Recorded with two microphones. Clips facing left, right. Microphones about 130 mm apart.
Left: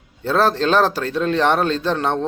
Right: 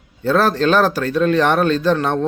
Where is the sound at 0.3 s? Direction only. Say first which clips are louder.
Right 2 dB; 25° left (ahead or behind).